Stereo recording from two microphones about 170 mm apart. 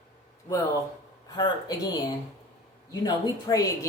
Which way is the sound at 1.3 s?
25° left (ahead or behind).